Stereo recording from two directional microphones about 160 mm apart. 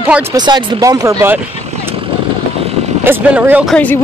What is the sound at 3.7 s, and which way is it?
Speech, 10° left (ahead or behind).